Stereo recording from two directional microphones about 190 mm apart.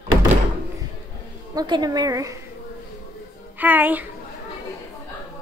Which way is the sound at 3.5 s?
10° right (ahead or behind).